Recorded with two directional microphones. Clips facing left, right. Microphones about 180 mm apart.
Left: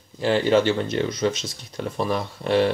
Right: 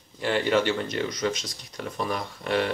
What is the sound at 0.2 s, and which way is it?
Speech, 30° left (ahead or behind).